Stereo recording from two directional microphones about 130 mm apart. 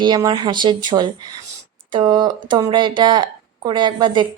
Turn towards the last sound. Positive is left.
turn(degrees=-35)  # may be behind; listen again after turning